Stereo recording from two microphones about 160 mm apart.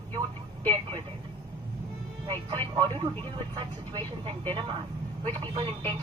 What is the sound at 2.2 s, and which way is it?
Speech, 30° right (ahead or behind).